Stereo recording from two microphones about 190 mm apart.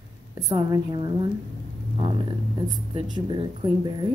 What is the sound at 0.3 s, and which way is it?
Speech, 20° right (ahead or behind).